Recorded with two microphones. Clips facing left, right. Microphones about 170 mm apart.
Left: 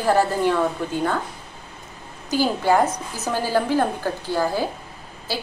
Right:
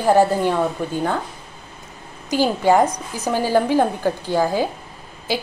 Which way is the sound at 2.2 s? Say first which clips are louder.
Right 3 dB; 15° right (ahead or behind).